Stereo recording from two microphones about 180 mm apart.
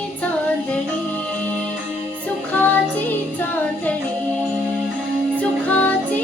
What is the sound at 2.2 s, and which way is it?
Music, 10° left (ahead or behind).